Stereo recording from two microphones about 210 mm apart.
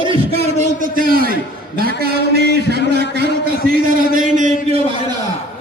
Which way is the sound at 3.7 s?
40° right (ahead or behind).